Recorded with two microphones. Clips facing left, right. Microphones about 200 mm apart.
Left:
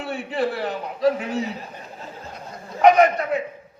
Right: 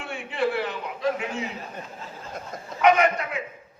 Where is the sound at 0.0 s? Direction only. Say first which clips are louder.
Left 2 dB; 40° left (ahead or behind).